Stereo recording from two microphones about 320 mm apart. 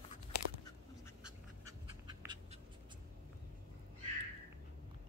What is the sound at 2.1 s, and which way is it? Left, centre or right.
Cat, centre.